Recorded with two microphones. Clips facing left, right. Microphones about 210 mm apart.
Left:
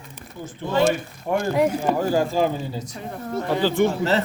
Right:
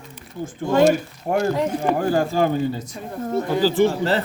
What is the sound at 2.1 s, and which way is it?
Speech, 55° right (ahead or behind).